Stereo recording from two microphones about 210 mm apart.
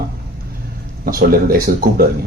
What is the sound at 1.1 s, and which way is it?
Speech, 45° right (ahead or behind).